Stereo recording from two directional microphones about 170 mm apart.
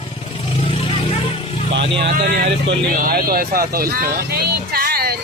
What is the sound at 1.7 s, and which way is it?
Speech, 80° right.